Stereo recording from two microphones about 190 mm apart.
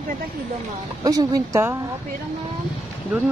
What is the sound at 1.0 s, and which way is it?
Speech, 20° right (ahead or behind).